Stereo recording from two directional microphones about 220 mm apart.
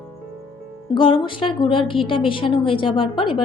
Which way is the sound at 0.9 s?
25° left (ahead or behind).